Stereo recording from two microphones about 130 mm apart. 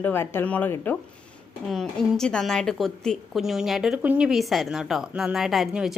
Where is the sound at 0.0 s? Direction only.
15° left (ahead or behind).